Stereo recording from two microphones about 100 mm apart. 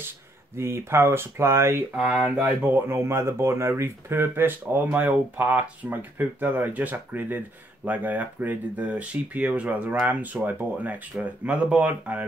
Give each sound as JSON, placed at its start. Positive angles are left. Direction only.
{"t": 0.6, "sound": "speech", "side_deg": -25}